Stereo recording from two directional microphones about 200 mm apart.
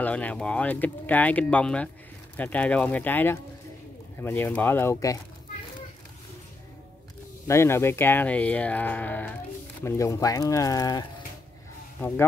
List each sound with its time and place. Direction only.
0.0 s speech: 5° left (ahead or behind)
7.4 s speech: 15° left (ahead or behind)